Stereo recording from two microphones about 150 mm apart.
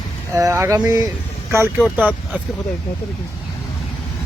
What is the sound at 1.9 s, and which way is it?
Speech, 10° right (ahead or behind).